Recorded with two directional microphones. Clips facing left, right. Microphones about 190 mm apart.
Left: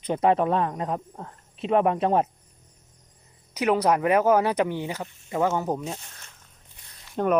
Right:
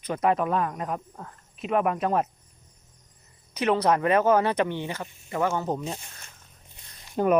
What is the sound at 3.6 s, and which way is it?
Speech, 10° left (ahead or behind).